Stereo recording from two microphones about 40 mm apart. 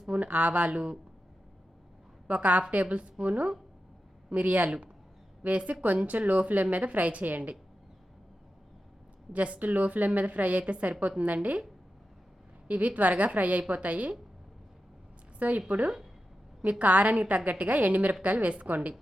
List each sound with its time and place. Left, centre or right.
0.1 s speech: right
2.2 s a woman's voice: right
9.3 s a woman's voice: right
12.6 s a woman's voice: right
15.4 s speech: right
16.6 s a woman's voice: right